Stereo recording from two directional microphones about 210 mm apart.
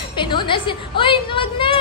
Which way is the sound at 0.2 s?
20° left (ahead or behind).